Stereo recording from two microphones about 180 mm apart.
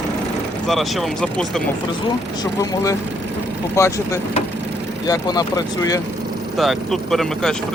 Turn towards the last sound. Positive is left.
turn(degrees=0)  # may be behind; listen again after turning